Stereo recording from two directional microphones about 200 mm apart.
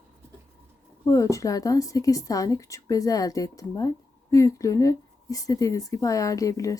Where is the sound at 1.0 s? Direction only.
15° left (ahead or behind).